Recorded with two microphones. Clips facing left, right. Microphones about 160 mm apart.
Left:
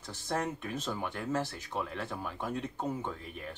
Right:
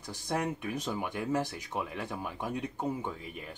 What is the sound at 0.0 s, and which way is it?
Speech, 15° right (ahead or behind).